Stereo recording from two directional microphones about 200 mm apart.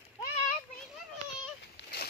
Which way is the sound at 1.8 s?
60° left (ahead or behind).